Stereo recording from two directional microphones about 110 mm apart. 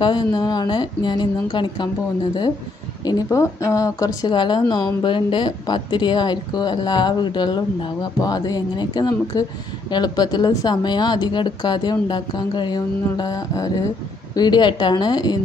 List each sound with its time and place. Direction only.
0.0 s speech: 40° left (ahead or behind)
3.1 s speech: 30° left (ahead or behind)